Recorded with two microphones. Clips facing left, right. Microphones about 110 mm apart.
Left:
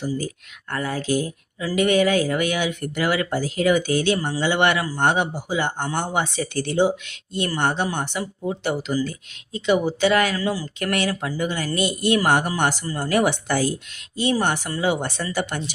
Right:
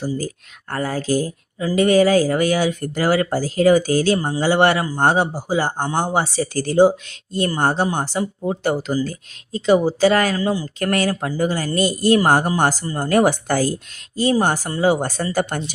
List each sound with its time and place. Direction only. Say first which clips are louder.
0.0 s speech: right 2 dB; 35° right (ahead or behind)
10.8 s speech: right 4 dB; 40° right (ahead or behind)